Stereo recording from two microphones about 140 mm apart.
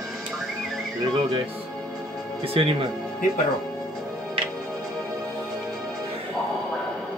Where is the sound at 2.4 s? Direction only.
40° right (ahead or behind).